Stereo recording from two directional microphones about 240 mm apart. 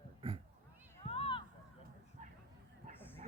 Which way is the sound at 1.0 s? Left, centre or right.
Left.